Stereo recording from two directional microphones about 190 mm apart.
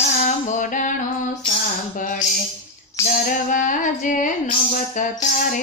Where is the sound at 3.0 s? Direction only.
45° left (ahead or behind).